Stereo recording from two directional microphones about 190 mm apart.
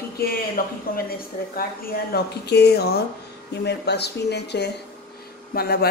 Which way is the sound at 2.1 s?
60° left (ahead or behind).